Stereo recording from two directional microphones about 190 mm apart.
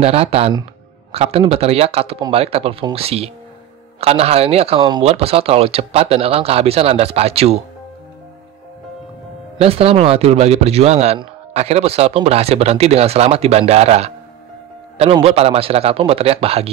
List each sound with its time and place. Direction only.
0.0 s a man's voice: 30° right (ahead or behind)
9.6 s a man's voice: 30° right (ahead or behind)